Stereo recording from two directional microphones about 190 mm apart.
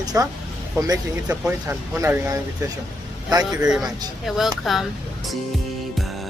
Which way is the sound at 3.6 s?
5° right (ahead or behind).